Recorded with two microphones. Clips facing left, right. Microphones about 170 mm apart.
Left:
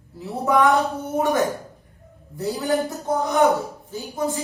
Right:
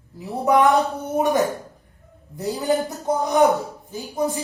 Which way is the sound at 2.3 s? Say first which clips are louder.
Right 1 dB; 20° right (ahead or behind).